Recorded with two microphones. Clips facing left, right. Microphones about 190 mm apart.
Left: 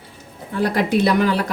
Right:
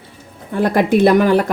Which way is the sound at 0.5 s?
50° right (ahead or behind).